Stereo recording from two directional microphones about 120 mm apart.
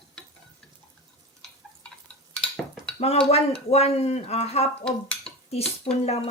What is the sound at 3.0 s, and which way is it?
Speech, 55° left (ahead or behind).